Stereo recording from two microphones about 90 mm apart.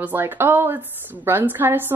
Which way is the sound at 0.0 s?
20° right (ahead or behind).